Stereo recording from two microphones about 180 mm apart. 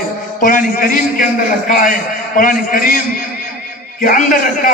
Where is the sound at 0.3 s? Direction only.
50° left (ahead or behind).